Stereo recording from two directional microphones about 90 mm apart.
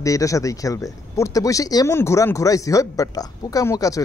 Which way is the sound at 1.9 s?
30° left (ahead or behind).